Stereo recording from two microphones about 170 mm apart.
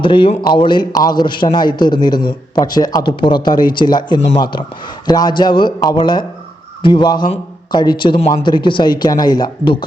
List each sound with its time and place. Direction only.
0.0 s a man's voice: 30° left (ahead or behind)